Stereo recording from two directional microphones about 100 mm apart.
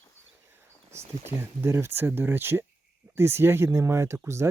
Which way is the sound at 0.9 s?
25° right (ahead or behind).